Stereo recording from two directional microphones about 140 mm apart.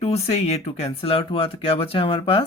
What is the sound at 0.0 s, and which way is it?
Speech, 45° left (ahead or behind).